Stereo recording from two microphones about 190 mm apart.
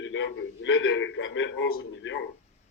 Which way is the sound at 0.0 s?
85° left.